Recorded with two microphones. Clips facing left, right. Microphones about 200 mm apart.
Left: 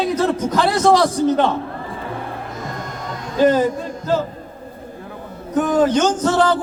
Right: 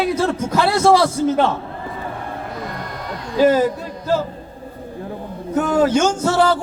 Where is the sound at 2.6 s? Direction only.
45° left (ahead or behind).